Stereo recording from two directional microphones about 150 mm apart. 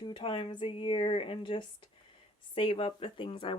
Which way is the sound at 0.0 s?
35° left (ahead or behind).